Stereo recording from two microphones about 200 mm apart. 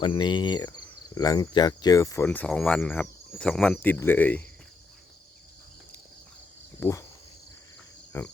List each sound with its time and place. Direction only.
0.0 s speech: 25° left (ahead or behind); by 4.4 s 10° left (ahead or behind)
6.7 s speech: 15° left (ahead or behind)
8.1 s speech: 15° left (ahead or behind)